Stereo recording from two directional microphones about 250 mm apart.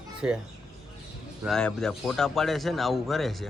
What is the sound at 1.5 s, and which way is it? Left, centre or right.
A man's voice, centre.